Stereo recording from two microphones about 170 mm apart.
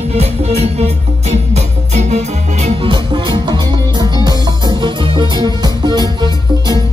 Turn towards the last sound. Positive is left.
turn(degrees=-25)  # may be behind; listen again after turning